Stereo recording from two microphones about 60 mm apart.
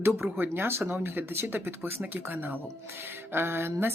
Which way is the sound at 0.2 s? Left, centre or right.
Right.